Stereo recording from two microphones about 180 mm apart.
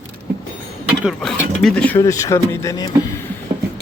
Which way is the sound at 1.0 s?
Centre (ahead or behind).